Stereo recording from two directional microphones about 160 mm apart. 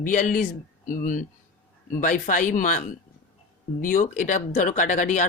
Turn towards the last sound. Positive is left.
turn(degrees=50)  # may be behind; listen again after turning